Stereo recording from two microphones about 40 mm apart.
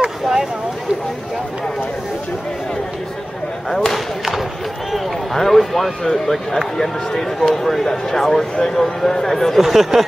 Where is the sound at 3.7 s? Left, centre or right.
Centre.